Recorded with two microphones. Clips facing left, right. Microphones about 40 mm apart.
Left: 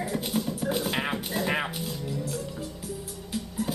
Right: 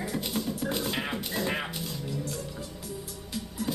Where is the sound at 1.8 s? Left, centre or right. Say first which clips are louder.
Left 2 dB; centre.